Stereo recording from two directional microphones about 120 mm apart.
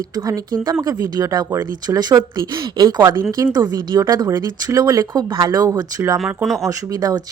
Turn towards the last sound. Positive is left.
turn(degrees=-30)  # may be behind; listen again after turning